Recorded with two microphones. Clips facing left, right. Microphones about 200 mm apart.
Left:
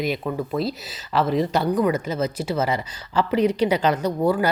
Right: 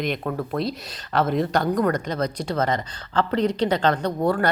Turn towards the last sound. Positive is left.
turn(degrees=5)  # may be behind; listen again after turning